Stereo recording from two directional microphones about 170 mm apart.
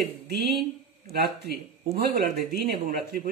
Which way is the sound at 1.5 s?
70° right (ahead or behind).